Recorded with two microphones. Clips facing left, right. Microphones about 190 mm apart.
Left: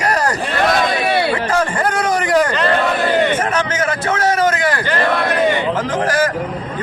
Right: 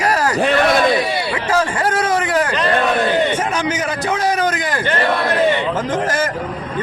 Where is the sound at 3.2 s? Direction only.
10° right (ahead or behind).